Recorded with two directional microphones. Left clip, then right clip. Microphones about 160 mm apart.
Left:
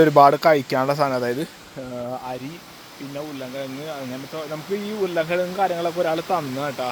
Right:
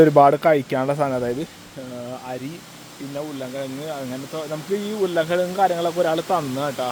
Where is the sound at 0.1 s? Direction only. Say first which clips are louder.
Left 1 dB; 20° right (ahead or behind).